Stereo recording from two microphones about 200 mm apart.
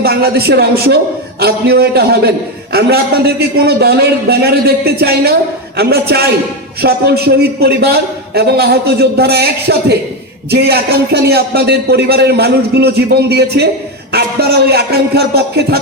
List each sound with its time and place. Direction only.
0.0 s a man's voice: 50° right (ahead or behind)
14.7 s a man's voice: 55° right (ahead or behind)